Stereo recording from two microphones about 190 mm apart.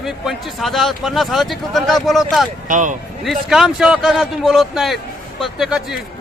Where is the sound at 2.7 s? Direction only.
40° right (ahead or behind).